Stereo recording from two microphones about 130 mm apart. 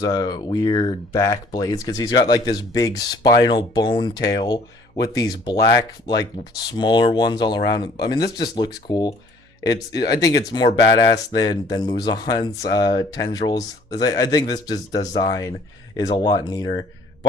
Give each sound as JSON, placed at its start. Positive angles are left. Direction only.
{"t": 0.0, "sound": "speech", "side_deg": 30}